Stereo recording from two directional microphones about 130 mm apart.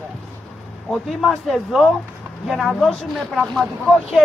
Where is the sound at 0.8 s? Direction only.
5° left (ahead or behind).